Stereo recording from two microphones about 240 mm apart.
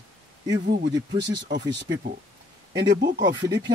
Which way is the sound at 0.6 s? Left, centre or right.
Right.